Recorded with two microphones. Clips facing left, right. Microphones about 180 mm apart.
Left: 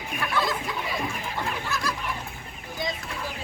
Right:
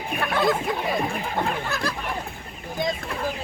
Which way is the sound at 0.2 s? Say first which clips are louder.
Right 5 dB; 55° right (ahead or behind).